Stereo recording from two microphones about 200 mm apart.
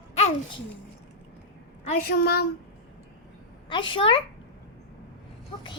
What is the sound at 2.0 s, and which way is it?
Speech, 50° left (ahead or behind).